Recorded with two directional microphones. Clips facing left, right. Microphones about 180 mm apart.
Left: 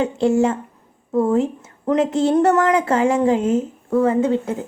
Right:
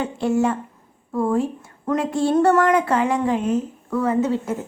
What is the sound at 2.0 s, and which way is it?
Speech, 20° left (ahead or behind).